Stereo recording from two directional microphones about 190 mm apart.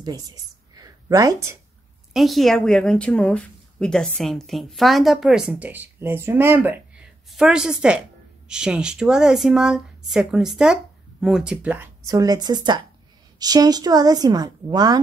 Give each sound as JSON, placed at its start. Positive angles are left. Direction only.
{"t": 0.0, "sound": "a woman's voice", "side_deg": -20}
{"t": 2.1, "sound": "speech", "side_deg": 0}